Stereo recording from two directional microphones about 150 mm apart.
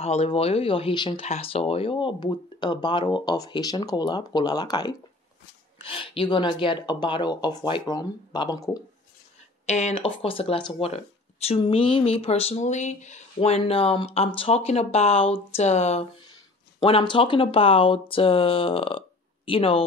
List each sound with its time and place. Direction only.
0.0 s speech: 45° left (ahead or behind)
1.2 s speech: 45° left (ahead or behind); by 8.8 s 20° left (ahead or behind)
9.7 s speech: 50° left (ahead or behind)
16.8 s speech: 35° left (ahead or behind)